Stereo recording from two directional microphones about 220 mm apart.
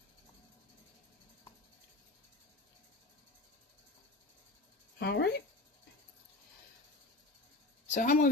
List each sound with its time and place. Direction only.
4.9 s speech: 50° left (ahead or behind)
7.9 s a woman's voice: 35° left (ahead or behind)